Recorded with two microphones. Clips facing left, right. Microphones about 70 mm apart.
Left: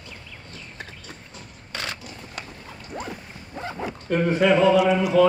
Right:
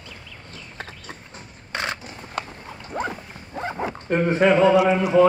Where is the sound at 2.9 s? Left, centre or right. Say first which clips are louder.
Right 6 dB; right.